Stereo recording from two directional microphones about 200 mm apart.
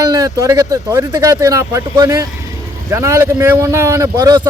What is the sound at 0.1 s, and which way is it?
Speech, 15° right (ahead or behind).